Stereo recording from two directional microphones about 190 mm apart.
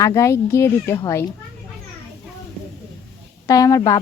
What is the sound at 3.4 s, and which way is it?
Speech, 20° left (ahead or behind).